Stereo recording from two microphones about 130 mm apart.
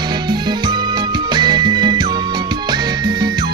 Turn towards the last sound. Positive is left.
turn(degrees=-35)  # may be behind; listen again after turning